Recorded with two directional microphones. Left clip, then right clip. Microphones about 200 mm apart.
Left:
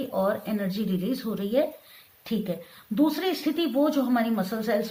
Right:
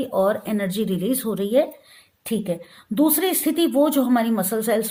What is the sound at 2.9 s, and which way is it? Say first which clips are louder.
Speech: right 5 dB; 40° right (ahead or behind).